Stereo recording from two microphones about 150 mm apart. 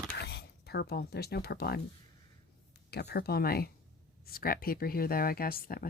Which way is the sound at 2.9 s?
90° left.